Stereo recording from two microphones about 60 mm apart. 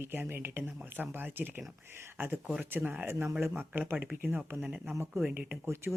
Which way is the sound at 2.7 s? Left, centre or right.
Right.